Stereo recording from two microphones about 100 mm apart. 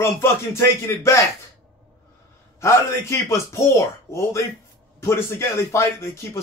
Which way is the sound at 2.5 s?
30° left (ahead or behind).